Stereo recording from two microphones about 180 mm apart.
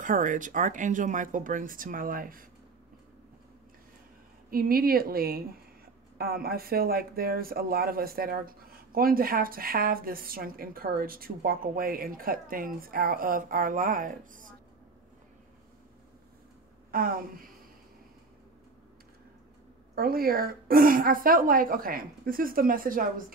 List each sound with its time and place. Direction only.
0.0 s speech: 45° right (ahead or behind)
4.5 s speech: 55° right (ahead or behind)
16.9 s speech: 50° right (ahead or behind)
20.0 s speech: 55° right (ahead or behind)